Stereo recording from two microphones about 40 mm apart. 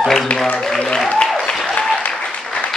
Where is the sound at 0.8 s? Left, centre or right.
Left.